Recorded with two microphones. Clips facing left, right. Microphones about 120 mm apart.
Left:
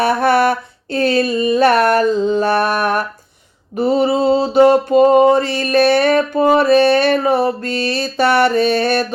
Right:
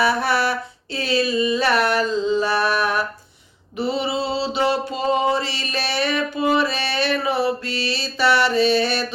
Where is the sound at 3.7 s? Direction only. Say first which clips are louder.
Left 8 dB; 45° left (ahead or behind).